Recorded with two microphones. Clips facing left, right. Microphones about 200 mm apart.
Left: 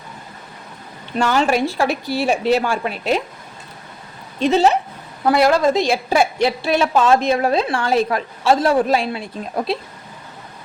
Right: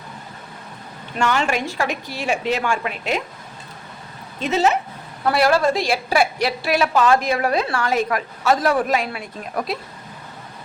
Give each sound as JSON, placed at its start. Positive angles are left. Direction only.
{"t": 1.2, "sound": "a woman's voice", "side_deg": 35}
{"t": 4.4, "sound": "a woman's voice", "side_deg": 35}
{"t": 5.2, "sound": "a woman's voice", "side_deg": 20}